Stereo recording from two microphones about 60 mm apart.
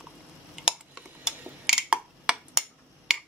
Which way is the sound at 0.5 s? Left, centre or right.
Centre.